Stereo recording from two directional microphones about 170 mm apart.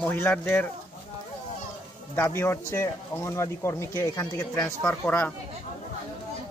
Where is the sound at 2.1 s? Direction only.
15° left (ahead or behind).